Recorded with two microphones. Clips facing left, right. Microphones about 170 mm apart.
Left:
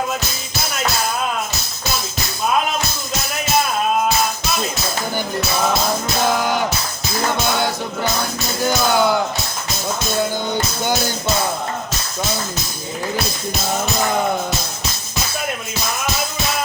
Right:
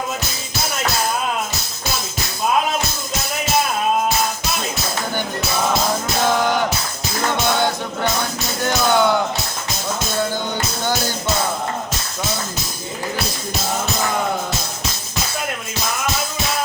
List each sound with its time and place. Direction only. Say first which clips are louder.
8.6 s speech: even; 5° left (ahead or behind)